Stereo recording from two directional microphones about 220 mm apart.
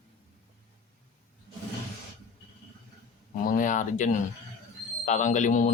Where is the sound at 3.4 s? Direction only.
35° left (ahead or behind).